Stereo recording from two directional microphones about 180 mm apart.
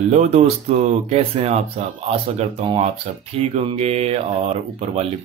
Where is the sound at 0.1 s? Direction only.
35° right (ahead or behind).